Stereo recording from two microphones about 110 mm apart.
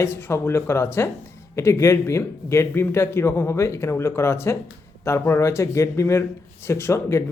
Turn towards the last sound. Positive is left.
turn(degrees=25)  # may be behind; listen again after turning